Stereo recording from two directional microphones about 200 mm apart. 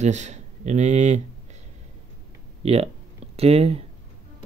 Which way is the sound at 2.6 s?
30° right (ahead or behind).